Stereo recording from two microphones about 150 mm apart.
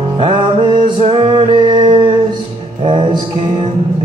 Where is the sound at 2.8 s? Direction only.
35° right (ahead or behind).